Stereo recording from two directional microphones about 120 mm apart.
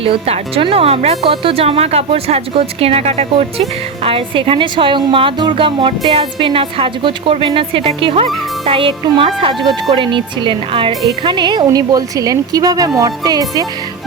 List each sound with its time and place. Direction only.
0.0 s speech: 50° right (ahead or behind)
4.0 s a woman's voice: 50° right (ahead or behind); by 13.7 s 30° right (ahead or behind)